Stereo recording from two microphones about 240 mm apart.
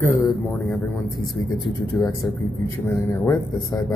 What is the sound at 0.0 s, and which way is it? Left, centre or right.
Speech, centre.